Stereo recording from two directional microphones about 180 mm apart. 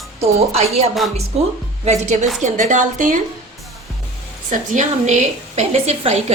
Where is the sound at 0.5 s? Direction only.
35° right (ahead or behind).